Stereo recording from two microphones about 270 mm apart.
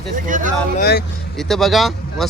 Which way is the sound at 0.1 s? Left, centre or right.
Right.